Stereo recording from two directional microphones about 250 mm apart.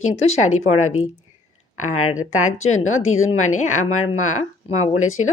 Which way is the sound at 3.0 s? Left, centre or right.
Left.